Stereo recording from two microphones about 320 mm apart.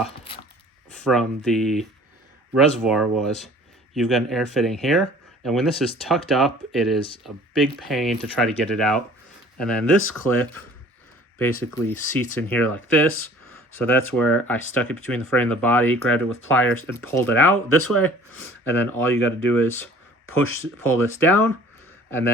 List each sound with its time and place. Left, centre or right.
1.0 s speech: centre
20.2 s speech: left
21.0 s speech: centre